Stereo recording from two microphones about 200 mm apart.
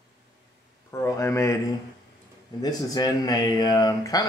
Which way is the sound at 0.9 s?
15° left (ahead or behind).